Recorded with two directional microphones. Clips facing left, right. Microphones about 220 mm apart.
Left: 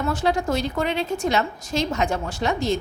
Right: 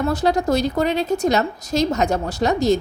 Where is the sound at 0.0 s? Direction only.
40° right (ahead or behind).